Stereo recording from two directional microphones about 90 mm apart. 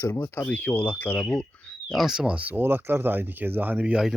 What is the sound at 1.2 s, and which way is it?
Speech, 10° left (ahead or behind).